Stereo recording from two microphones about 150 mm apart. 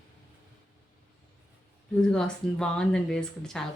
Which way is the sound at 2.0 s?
5° left (ahead or behind).